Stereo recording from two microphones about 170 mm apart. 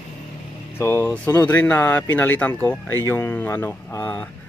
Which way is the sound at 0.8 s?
15° left (ahead or behind).